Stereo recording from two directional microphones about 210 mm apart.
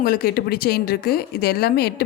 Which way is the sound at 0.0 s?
45° left (ahead or behind).